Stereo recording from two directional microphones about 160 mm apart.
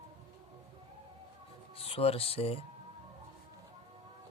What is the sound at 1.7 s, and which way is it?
Speech, 35° left (ahead or behind).